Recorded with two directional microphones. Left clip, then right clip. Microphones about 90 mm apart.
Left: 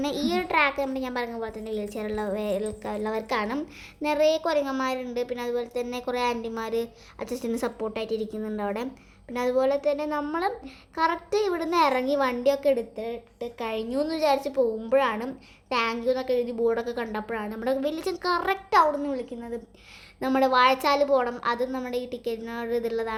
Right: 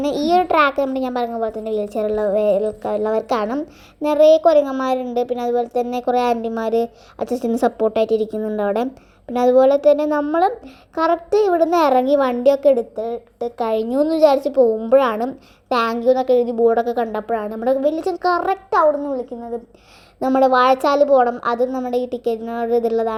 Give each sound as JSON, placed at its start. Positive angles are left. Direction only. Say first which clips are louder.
{"t": 0.0, "sound": "a child's voice", "louder": "right 11 dB", "side_deg": -40}
{"t": 2.8, "sound": "a woman's voice", "louder": "right 10 dB", "side_deg": -60}
{"t": 4.0, "sound": "a child's voice", "louder": "right 11 dB", "side_deg": -45}
{"t": 10.9, "sound": "a child's voice", "louder": "right 8 dB", "side_deg": -45}
{"t": 13.6, "sound": "a woman's voice", "louder": "right 10 dB", "side_deg": -65}
{"t": 17.6, "sound": "a woman's voice", "louder": "right 9 dB", "side_deg": -25}
{"t": 18.7, "sound": "a child's voice", "louder": "right 5 dB", "side_deg": -15}
{"t": 20.4, "sound": "a woman's voice", "louder": "right 6 dB", "side_deg": -40}
{"t": 22.0, "sound": "a child's voice", "louder": "right 10 dB", "side_deg": -50}